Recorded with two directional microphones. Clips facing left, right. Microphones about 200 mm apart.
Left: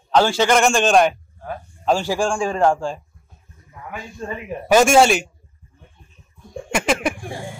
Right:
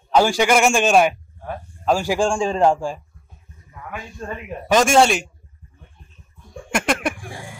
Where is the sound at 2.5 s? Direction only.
15° right (ahead or behind).